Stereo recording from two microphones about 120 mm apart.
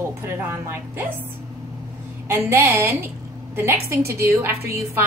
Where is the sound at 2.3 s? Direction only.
20° right (ahead or behind).